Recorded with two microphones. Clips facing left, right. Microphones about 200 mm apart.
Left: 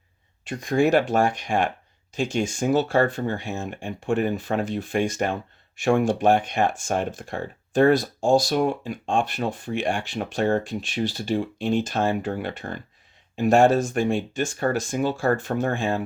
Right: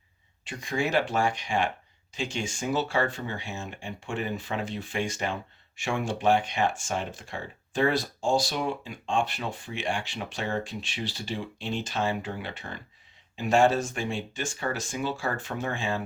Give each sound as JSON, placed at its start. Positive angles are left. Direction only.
{"t": 0.4, "sound": "speech", "side_deg": 55}